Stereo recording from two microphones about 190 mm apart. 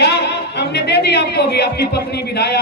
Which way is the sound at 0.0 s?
65° left (ahead or behind).